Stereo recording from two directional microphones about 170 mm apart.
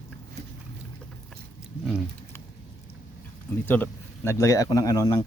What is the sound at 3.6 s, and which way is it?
Speech, 10° left (ahead or behind).